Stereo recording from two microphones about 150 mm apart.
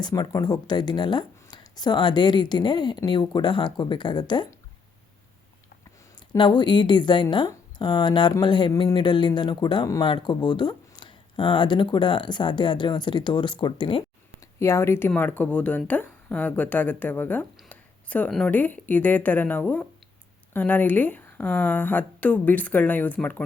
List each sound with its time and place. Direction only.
0.0 s speech: 25° left (ahead or behind)
6.3 s speech: 30° left (ahead or behind)
14.6 s a woman's voice: 15° left (ahead or behind)